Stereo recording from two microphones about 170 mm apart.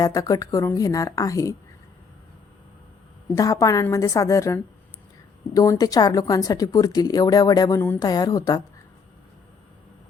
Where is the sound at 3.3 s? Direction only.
20° left (ahead or behind).